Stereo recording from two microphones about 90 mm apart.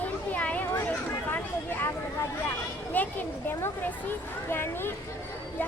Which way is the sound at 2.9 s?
20° left (ahead or behind).